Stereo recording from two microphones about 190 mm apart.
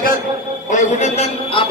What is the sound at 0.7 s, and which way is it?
A man's voice, 40° left (ahead or behind).